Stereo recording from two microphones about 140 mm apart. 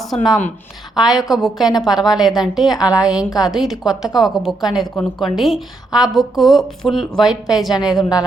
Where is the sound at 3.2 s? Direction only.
25° left (ahead or behind).